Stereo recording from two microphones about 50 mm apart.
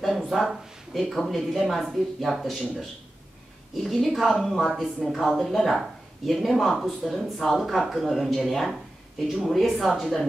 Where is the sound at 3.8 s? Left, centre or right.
Centre.